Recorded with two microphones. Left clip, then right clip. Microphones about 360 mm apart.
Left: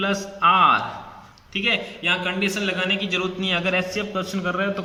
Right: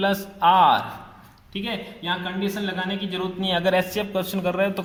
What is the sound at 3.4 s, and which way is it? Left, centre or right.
Speech, left.